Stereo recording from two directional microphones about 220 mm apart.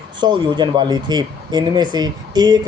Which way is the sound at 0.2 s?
20° right (ahead or behind).